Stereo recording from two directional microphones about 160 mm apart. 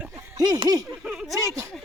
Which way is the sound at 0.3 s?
25° right (ahead or behind).